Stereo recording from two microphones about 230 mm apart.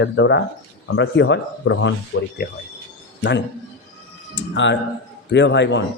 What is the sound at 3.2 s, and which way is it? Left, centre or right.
A man's voice, left.